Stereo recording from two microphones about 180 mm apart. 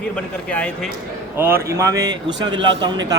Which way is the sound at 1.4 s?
10° right (ahead or behind).